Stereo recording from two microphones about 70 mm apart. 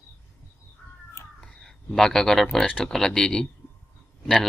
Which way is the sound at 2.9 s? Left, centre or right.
Centre.